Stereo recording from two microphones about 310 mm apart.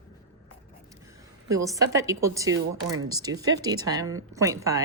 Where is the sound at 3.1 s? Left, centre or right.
Centre.